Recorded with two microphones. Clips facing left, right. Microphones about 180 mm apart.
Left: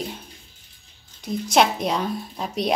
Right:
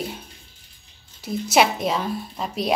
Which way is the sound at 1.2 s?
5° right (ahead or behind).